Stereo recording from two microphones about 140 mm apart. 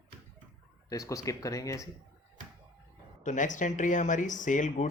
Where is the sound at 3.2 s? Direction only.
65° left (ahead or behind).